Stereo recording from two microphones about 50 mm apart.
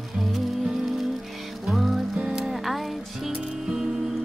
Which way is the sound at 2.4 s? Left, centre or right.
Centre.